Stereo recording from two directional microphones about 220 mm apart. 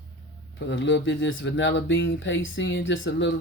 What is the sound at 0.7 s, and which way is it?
Speech, 55° left (ahead or behind).